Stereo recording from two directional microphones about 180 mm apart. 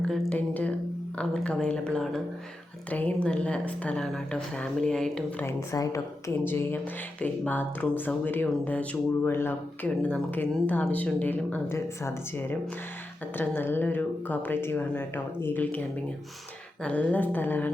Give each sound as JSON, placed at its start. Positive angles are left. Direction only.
{"t": 0.1, "sound": "speech", "side_deg": 5}
{"t": 5.5, "sound": "speech", "side_deg": 20}